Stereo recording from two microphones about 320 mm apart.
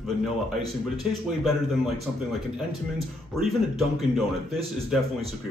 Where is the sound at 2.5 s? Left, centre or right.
Centre.